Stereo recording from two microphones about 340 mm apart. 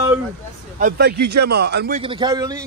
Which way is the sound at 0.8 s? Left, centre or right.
Right.